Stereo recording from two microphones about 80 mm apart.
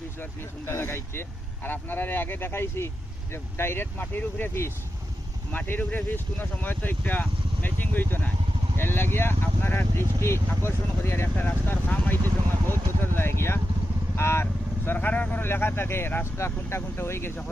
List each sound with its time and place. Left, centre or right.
0.2 s speech: left